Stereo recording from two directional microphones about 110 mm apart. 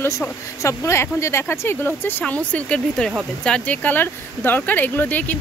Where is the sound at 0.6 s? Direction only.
25° left (ahead or behind).